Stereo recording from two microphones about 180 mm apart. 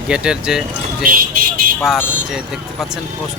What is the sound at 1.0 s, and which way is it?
Speech, 50° right (ahead or behind).